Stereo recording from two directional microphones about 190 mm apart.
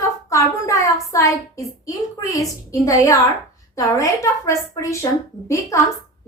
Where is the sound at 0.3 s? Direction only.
15° left (ahead or behind).